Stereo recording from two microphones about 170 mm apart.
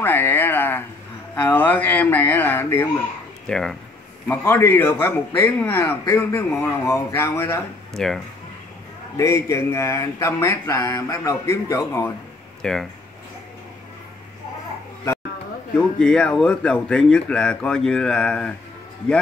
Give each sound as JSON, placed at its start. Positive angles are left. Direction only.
{"t": 0.0, "sound": "a sound", "side_deg": 10}
{"t": 1.3, "sound": "a man's voice", "side_deg": 10}
{"t": 7.9, "sound": "speech", "side_deg": 5}
{"t": 9.1, "sound": "a man's voice", "side_deg": 15}
{"t": 12.6, "sound": "speech", "side_deg": 5}
{"t": 16.0, "sound": "speech", "side_deg": 5}